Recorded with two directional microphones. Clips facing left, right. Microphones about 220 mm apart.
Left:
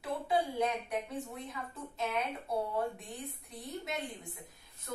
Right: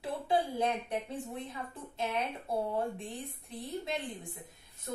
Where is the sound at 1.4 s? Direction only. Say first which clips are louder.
Right 1 dB; 30° right (ahead or behind).